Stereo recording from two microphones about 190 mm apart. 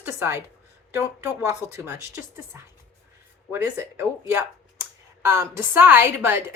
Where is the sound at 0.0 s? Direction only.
10° right (ahead or behind).